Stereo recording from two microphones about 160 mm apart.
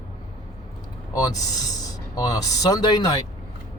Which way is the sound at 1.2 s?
25° left (ahead or behind).